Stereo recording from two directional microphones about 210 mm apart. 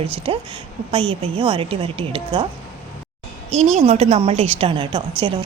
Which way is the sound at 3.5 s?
30° right (ahead or behind).